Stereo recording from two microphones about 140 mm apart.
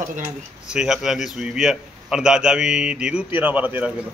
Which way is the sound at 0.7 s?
5° right (ahead or behind).